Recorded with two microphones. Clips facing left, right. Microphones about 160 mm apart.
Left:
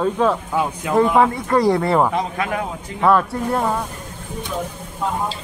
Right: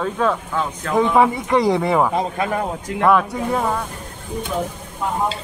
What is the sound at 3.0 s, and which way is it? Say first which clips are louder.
Speech: even; centre (ahead or behind).